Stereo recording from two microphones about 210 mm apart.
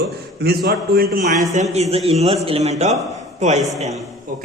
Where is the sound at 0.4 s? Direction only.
45° right (ahead or behind).